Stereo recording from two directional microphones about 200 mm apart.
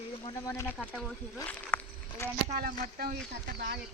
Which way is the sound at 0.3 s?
15° left (ahead or behind).